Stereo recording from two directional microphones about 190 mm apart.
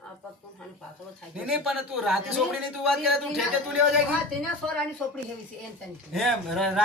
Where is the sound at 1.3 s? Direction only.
5° right (ahead or behind).